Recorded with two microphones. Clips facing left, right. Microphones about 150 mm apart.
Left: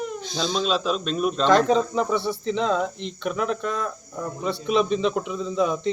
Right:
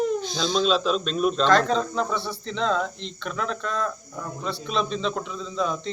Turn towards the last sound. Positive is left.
turn(degrees=15)  # may be behind; listen again after turning